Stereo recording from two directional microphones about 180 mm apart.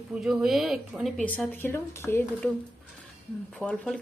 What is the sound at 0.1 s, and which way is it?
Speech, 5° right (ahead or behind).